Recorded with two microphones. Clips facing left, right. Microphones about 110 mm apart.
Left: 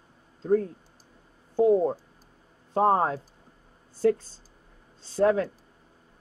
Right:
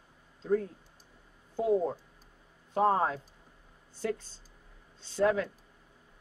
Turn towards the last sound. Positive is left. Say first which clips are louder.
# left 5 dB
turn(degrees=35)  # may be behind; listen again after turning